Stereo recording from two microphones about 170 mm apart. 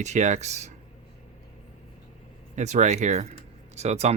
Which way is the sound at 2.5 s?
45° right (ahead or behind).